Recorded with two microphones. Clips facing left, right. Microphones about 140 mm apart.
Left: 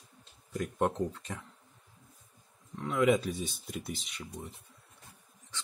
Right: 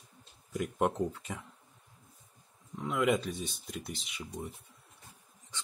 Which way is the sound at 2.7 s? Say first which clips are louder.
Left 2 dB; 5° right (ahead or behind).